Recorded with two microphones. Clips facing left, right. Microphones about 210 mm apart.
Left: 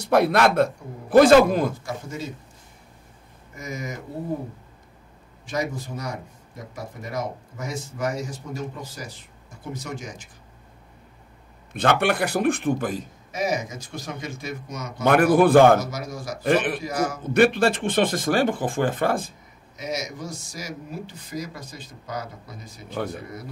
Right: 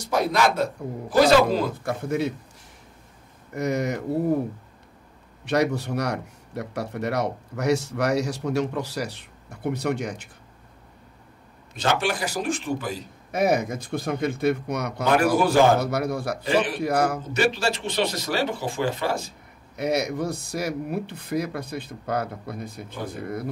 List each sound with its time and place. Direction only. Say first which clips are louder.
0.0 s a man's voice: left 3 dB; 60° left (ahead or behind)
1.8 s speech: right 7 dB; 60° right (ahead or behind)
3.5 s speech: right 8 dB; 65° right (ahead or behind)
5.4 s speech: right 6 dB; 70° right (ahead or behind)
11.7 s a man's voice: left 3 dB; 55° left (ahead or behind)
13.3 s speech: right 4 dB; 60° right (ahead or behind)
15.0 s a man's voice: left 4 dB; 55° left (ahead or behind)
15.8 s speech: right 6 dB; 60° right (ahead or behind)
16.4 s a man's voice: left 3 dB; 55° left (ahead or behind)
16.8 s speech: right 4 dB; 60° right (ahead or behind)
17.3 s speech: left 5 dB; 55° left (ahead or behind)
19.7 s speech: right 6 dB; 60° right (ahead or behind)